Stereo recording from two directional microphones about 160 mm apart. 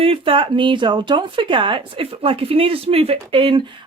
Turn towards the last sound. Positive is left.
turn(degrees=-30)  # may be behind; listen again after turning